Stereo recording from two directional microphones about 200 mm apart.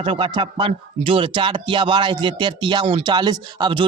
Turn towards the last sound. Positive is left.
turn(degrees=-25)  # may be behind; listen again after turning